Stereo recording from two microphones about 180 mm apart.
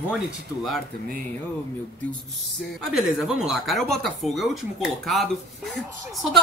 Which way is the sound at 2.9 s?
5° right (ahead or behind).